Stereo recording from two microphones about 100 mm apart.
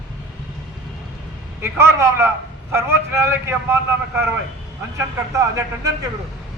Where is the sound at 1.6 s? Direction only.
25° right (ahead or behind).